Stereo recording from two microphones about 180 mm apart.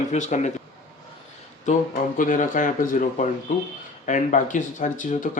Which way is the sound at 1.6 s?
50° left (ahead or behind).